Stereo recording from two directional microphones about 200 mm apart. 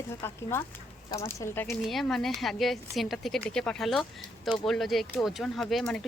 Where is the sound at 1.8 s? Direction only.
Centre (ahead or behind).